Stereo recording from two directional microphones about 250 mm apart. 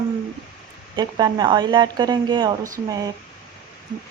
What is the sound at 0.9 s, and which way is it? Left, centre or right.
Speech, centre.